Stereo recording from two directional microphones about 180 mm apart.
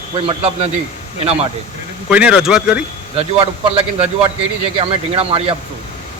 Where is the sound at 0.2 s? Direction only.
30° right (ahead or behind).